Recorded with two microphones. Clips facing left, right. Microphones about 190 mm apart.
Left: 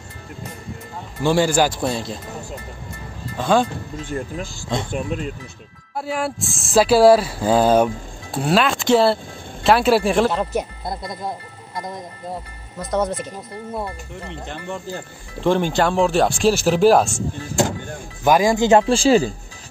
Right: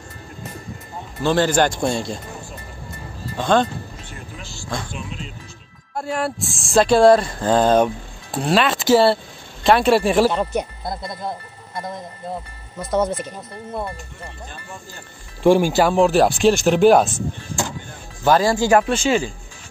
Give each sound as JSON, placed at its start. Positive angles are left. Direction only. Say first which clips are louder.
{"t": 1.2, "sound": "speech", "louder": "even", "side_deg": 10}
{"t": 3.3, "sound": "speech", "louder": "even", "side_deg": 5}
{"t": 4.9, "sound": "speech", "louder": "left 8 dB", "side_deg": 55}
{"t": 5.9, "sound": "speech", "louder": "even", "side_deg": 0}
{"t": 12.7, "sound": "speech", "louder": "right 1 dB", "side_deg": 0}
{"t": 14.3, "sound": "speech", "louder": "left 7 dB", "side_deg": 85}
{"t": 15.4, "sound": "speech", "louder": "right 3 dB", "side_deg": -10}
{"t": 18.2, "sound": "speech", "louder": "left 1 dB", "side_deg": 15}